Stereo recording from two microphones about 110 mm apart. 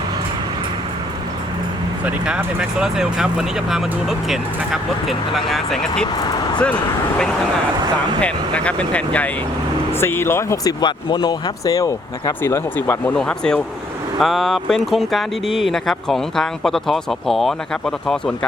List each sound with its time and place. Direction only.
2.0 s speech: 10° right (ahead or behind)
8.2 s speech: 10° left (ahead or behind)
13.1 s speech: 5° left (ahead or behind)